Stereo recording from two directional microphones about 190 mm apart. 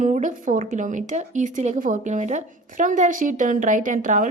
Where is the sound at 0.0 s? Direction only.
40° right (ahead or behind).